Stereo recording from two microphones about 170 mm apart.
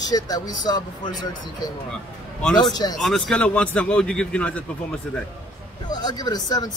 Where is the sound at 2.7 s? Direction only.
25° left (ahead or behind).